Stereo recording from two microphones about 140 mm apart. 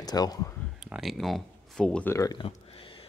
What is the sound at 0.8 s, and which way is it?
Speech, centre (ahead or behind).